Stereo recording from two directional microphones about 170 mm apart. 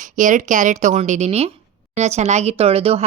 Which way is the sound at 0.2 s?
50° right (ahead or behind).